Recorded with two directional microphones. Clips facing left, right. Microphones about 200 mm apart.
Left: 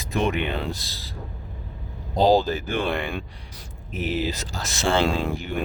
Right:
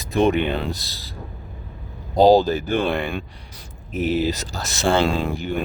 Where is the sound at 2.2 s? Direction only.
40° right (ahead or behind).